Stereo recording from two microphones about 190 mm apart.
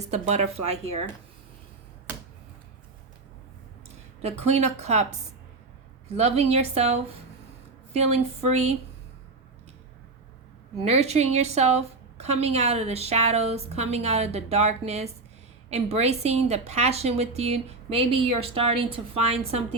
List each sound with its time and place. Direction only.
0.1 s a woman's voice: 35° right (ahead or behind)
4.2 s a woman's voice: 35° right (ahead or behind)
6.1 s a woman's voice: 35° right (ahead or behind)
10.8 s a woman's voice: 35° right (ahead or behind)